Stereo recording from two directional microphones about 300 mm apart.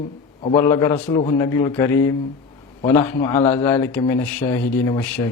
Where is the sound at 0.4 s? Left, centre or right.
Centre.